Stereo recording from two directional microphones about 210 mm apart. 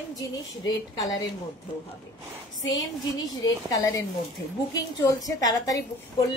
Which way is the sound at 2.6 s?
15° left (ahead or behind).